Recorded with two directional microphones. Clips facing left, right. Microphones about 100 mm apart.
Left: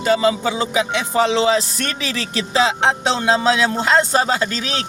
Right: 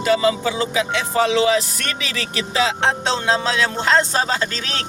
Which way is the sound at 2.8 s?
15° left (ahead or behind).